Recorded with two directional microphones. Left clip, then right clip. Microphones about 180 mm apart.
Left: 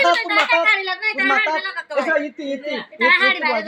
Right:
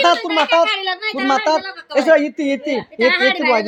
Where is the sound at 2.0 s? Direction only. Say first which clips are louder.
Right 7 dB; 65° right (ahead or behind).